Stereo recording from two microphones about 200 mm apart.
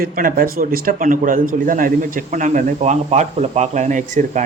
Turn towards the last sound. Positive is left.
turn(degrees=-40)  # may be behind; listen again after turning